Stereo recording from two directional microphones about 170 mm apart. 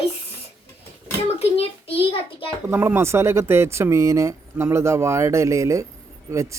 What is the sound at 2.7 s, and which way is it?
Speech, 15° right (ahead or behind).